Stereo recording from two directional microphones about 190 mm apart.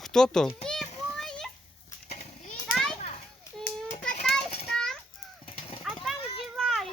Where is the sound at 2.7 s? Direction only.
5° left (ahead or behind).